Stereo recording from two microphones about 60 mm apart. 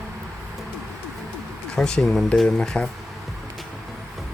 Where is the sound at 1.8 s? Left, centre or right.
Centre.